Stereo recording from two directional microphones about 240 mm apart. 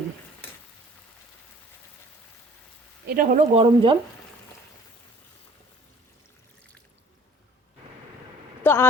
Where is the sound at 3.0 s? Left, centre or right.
Right.